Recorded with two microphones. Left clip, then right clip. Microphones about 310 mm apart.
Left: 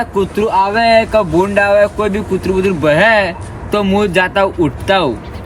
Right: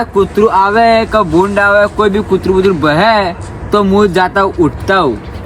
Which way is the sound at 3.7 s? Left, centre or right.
Centre.